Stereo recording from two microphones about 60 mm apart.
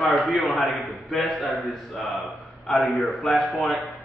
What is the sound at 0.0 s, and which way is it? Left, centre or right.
A man's voice, centre.